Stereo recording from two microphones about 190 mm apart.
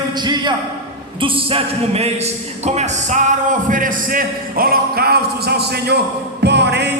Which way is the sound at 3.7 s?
45° right (ahead or behind).